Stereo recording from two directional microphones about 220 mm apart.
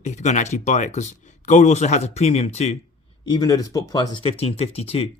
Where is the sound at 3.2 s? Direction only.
15° left (ahead or behind).